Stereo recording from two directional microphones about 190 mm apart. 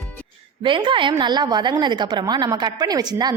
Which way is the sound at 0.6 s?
25° right (ahead or behind).